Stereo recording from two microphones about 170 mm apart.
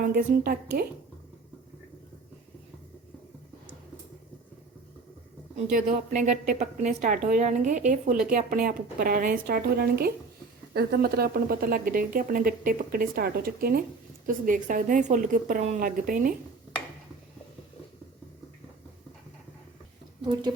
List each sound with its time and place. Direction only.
0.0 s a woman's voice: 60° right (ahead or behind)
5.7 s a woman's voice: 45° right (ahead or behind)
8.3 s a woman's voice: 55° right (ahead or behind)
20.2 s a woman's voice: 25° right (ahead or behind)